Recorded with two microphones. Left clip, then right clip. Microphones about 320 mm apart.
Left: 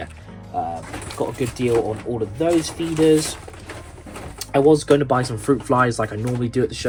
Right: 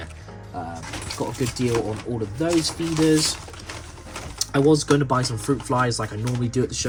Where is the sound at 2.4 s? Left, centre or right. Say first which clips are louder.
Left 3 dB; centre.